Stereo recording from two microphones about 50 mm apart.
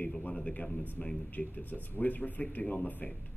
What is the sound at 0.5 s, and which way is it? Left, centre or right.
A man's voice, left.